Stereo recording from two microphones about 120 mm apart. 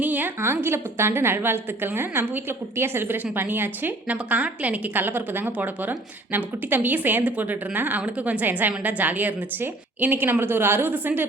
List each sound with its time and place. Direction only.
0.0 s a woman's voice: 15° right (ahead or behind)